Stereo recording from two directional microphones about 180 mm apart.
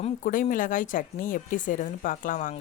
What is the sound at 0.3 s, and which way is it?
Speech, 50° left (ahead or behind).